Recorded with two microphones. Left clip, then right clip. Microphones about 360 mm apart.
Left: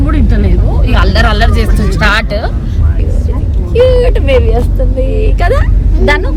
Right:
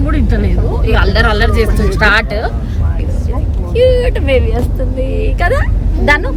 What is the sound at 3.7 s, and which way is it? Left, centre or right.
Vehicle, centre.